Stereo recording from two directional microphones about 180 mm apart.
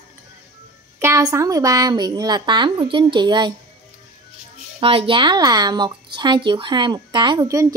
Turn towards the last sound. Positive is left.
turn(degrees=-20)  # may be behind; listen again after turning